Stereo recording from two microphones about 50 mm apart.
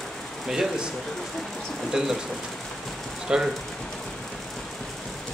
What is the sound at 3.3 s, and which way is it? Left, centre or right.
Speech, centre.